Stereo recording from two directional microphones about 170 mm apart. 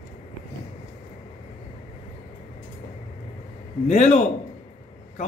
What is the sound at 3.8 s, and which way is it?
Speech, 40° left (ahead or behind).